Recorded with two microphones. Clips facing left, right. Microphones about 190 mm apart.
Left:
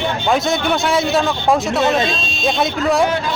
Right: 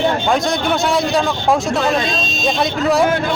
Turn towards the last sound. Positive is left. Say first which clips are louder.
# right 1 dB
turn(degrees=0)  # may be behind; listen again after turning